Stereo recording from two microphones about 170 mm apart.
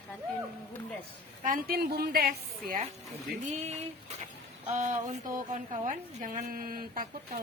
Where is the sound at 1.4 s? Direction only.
50° right (ahead or behind).